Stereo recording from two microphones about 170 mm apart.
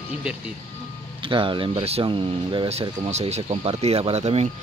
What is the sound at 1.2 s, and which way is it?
Speech, 30° right (ahead or behind).